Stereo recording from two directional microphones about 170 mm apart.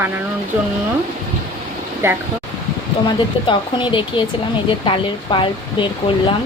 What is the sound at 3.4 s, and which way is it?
Speech, 30° left (ahead or behind).